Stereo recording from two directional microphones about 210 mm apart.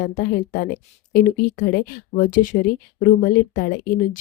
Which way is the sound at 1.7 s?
45° left (ahead or behind).